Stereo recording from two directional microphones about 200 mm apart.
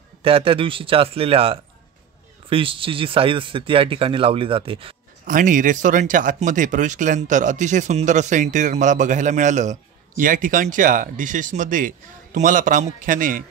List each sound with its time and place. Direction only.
0.2 s speech: 25° right (ahead or behind)
5.2 s speech: 40° right (ahead or behind)